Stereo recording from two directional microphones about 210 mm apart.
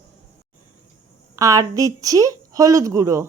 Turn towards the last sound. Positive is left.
turn(degrees=-15)  # may be behind; listen again after turning